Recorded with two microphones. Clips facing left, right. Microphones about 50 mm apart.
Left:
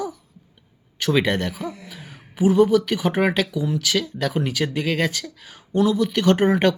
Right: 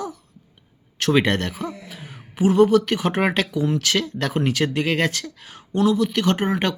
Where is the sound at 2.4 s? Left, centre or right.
Right.